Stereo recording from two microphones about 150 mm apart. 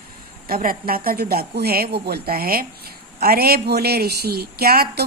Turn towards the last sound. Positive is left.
turn(degrees=-90)